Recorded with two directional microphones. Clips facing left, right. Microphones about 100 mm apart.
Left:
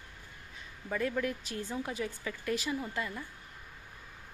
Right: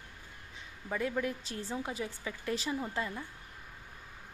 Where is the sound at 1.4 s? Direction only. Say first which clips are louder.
Left 1 dB; 30° right (ahead or behind).